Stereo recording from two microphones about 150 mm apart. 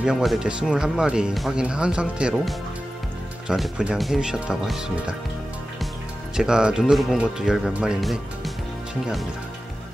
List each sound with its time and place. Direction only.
0.0 s speech: centre (ahead or behind)
6.3 s speech: 5° right (ahead or behind)